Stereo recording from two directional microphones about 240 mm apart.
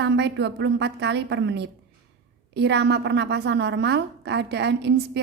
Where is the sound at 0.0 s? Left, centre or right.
Right.